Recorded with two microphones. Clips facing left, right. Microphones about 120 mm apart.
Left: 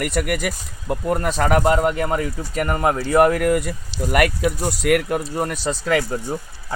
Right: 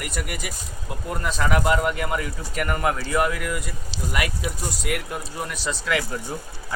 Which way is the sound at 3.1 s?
50° left (ahead or behind).